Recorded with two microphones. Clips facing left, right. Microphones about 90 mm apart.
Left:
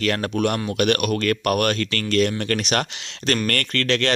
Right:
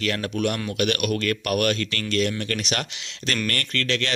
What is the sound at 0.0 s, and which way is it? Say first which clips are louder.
Speech: left 3 dB; 45° left (ahead or behind).